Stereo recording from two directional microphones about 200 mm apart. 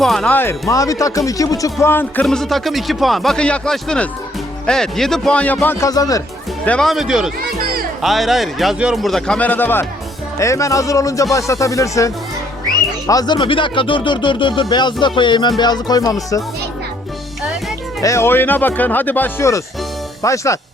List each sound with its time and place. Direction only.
0.0 s speech: centre (ahead or behind); by 6.2 s 20° left (ahead or behind)
6.7 s speech: centre (ahead or behind); by 16.1 s 20° left (ahead or behind)
18.0 s speech: 15° left (ahead or behind)